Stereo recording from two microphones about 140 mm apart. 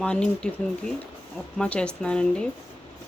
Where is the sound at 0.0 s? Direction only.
5° left (ahead or behind).